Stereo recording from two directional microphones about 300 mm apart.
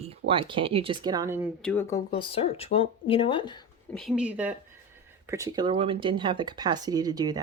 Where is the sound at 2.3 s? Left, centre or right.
Centre.